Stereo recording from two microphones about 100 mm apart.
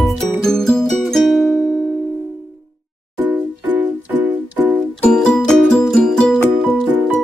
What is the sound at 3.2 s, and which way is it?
Music, 20° right (ahead or behind).